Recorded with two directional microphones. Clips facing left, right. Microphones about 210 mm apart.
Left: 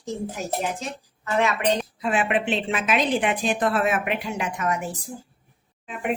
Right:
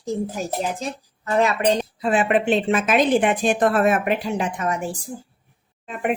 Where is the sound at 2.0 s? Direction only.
35° right (ahead or behind).